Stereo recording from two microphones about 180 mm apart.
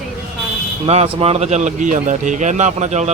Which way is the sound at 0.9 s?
35° right (ahead or behind).